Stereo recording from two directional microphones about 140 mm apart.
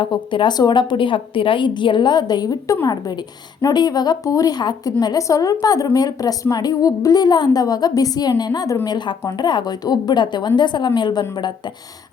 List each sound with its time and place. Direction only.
0.0 s a woman's voice: 35° left (ahead or behind)